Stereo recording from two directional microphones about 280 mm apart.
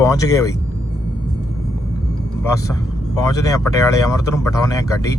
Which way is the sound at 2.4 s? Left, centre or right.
Centre.